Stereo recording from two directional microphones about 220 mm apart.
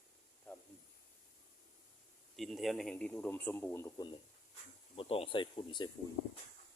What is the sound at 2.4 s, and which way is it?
A man's voice, centre (ahead or behind).